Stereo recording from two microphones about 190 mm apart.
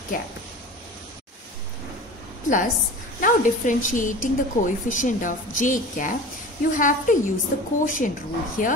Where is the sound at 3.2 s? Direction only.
45° left (ahead or behind).